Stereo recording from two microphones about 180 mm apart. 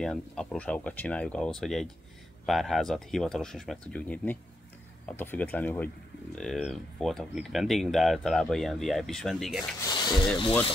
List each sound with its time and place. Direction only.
0.0 s speech: centre (ahead or behind)
9.8 s speech: 25° left (ahead or behind)